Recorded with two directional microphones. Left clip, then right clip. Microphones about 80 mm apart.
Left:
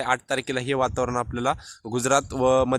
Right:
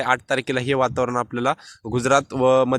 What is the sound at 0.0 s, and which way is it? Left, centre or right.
Speech, right.